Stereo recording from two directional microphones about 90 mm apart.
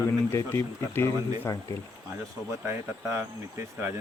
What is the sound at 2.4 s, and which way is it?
Speech, 25° right (ahead or behind).